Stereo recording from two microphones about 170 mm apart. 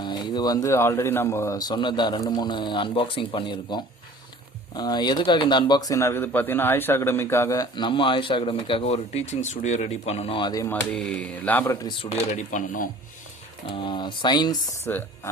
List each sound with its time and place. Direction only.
0.0 s speech: 25° left (ahead or behind)
10.5 s speech: 20° left (ahead or behind)
10.9 s speech: 5° left (ahead or behind)
11.6 s speech: 20° left (ahead or behind)
12.3 s speech: 45° left (ahead or behind)
13.7 s speech: 30° left (ahead or behind)
14.8 s speech: 10° left (ahead or behind)